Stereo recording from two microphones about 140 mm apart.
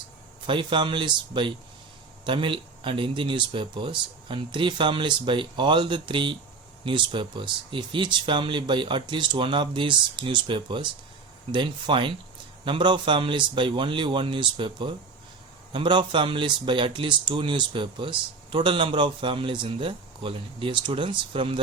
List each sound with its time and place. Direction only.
0.4 s speech: 35° right (ahead or behind)